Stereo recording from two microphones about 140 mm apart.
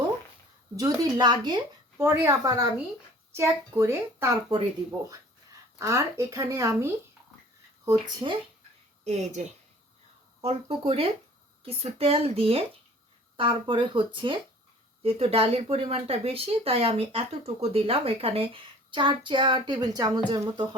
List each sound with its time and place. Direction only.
0.8 s a woman's voice: 25° right (ahead or behind)
2.0 s a woman's voice: 20° right (ahead or behind)
5.8 s a woman's voice: 20° right (ahead or behind)
7.9 s speech: 35° right (ahead or behind)
9.0 s speech: 55° right (ahead or behind); by 20.7 s 30° right (ahead or behind)